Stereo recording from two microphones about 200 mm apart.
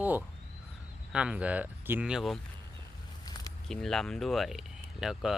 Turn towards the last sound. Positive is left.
turn(degrees=0)  # may be behind; listen again after turning